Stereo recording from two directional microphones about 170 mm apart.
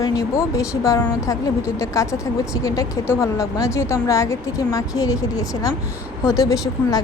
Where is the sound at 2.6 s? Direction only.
20° left (ahead or behind).